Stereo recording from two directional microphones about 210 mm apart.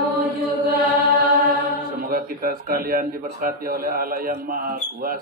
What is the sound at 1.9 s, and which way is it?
A man's voice, 45° right (ahead or behind).